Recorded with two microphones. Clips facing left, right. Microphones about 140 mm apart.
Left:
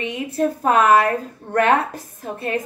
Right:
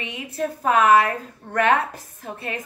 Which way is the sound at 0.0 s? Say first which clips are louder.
Left 6 dB; 40° left (ahead or behind).